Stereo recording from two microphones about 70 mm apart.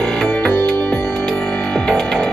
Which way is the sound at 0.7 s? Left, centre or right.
Left.